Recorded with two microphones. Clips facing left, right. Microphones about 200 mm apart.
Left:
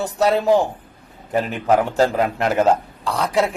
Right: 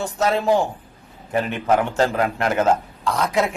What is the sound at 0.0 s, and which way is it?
A man's voice, 35° left (ahead or behind).